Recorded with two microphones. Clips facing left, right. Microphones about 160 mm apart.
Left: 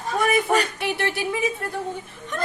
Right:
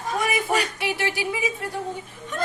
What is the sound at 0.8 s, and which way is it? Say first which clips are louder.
Speech: left 1 dB; 55° left (ahead or behind).